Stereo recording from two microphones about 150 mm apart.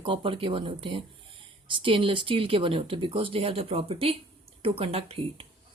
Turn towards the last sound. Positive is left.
turn(degrees=-40)  # may be behind; listen again after turning